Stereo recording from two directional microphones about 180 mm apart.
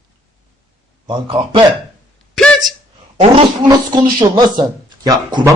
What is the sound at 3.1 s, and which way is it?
Speech, 30° right (ahead or behind).